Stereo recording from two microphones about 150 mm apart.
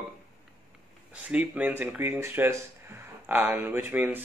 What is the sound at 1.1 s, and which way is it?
Speech, 10° right (ahead or behind).